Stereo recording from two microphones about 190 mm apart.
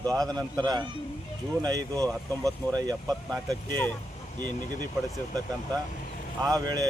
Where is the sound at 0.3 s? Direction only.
5° left (ahead or behind).